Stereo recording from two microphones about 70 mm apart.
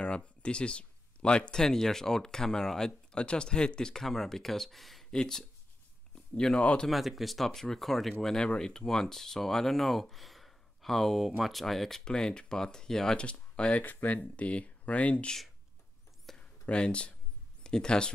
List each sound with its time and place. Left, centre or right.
0.0 s speech: centre
6.9 s speech: centre
16.3 s a sound: centre
17.6 s speech: centre